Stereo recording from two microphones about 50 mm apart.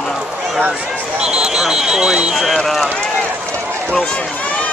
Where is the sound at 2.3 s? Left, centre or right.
Centre.